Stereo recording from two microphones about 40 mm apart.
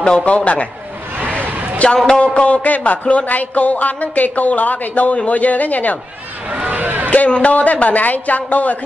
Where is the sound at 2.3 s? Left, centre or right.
Left.